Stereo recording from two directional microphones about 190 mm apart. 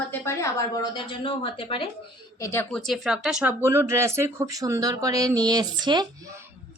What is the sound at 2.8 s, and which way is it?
Speech, centre (ahead or behind).